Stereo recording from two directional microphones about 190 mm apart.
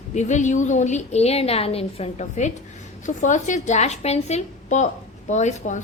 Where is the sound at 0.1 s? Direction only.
40° left (ahead or behind).